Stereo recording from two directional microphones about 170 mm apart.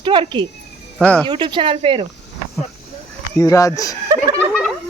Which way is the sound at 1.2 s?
25° right (ahead or behind).